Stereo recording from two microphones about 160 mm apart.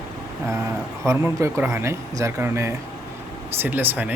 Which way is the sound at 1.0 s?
20° right (ahead or behind).